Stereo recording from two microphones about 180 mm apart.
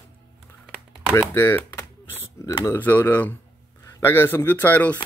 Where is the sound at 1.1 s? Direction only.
10° left (ahead or behind).